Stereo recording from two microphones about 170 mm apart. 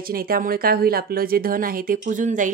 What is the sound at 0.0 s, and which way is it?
A woman's voice, 60° right (ahead or behind).